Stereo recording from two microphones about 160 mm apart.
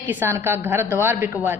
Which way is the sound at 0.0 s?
10° right (ahead or behind).